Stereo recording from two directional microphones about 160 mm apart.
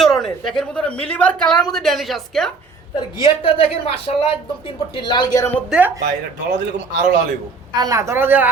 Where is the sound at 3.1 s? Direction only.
35° left (ahead or behind).